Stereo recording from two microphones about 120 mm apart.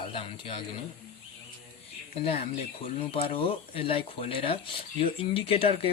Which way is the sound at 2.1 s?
55° left (ahead or behind).